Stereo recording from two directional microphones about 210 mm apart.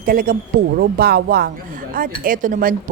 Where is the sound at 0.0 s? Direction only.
40° right (ahead or behind).